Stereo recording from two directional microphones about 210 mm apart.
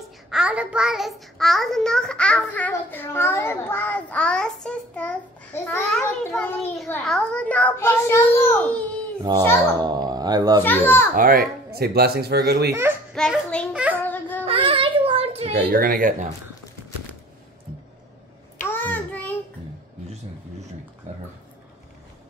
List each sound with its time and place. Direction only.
0.3 s a child's voice: 5° right (ahead or behind)
9.3 s speech: 20° right (ahead or behind)
10.6 s a child's voice: 10° left (ahead or behind)
11.1 s speech: 40° right (ahead or behind)
13.1 s a child's voice: centre (ahead or behind)
13.9 s a sound: 10° left (ahead or behind)
14.4 s child singing: 25° right (ahead or behind)
15.6 s speech: 45° right (ahead or behind)
18.6 s child singing: 10° left (ahead or behind)